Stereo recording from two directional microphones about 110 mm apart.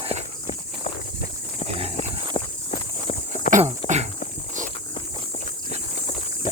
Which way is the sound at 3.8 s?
50° left (ahead or behind).